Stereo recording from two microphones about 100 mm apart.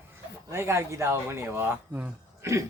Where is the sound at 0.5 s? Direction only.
25° right (ahead or behind).